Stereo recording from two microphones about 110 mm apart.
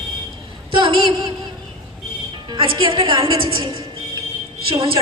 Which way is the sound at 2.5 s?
50° right (ahead or behind).